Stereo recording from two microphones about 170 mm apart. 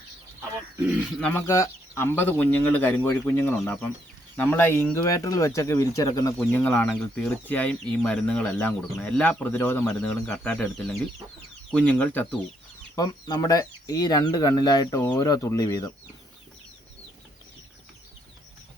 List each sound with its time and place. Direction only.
0.8 s speech: 10° right (ahead or behind)
1.2 s speech: 15° left (ahead or behind)
6.4 s speech: 10° left (ahead or behind)
13.0 s speech: 25° left (ahead or behind)